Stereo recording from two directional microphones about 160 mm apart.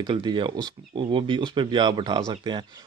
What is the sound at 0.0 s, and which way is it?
Speech, 25° right (ahead or behind).